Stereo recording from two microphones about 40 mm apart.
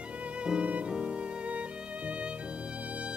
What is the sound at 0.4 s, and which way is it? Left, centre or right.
Music, right.